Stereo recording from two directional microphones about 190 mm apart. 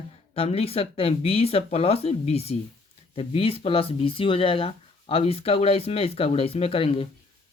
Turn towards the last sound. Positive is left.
turn(degrees=30)  # may be behind; listen again after turning